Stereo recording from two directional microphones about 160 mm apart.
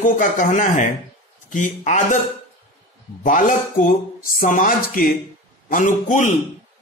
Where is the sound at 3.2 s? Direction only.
55° left (ahead or behind).